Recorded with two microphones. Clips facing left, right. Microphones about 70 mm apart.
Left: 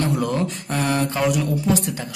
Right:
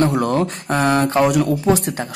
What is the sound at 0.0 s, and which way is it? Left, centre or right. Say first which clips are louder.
Speech: right 5 dB; right.